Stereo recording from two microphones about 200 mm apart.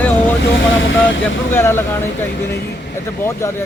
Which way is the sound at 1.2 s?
10° left (ahead or behind).